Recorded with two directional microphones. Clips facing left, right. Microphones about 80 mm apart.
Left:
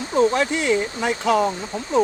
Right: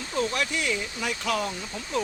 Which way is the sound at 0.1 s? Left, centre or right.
Left.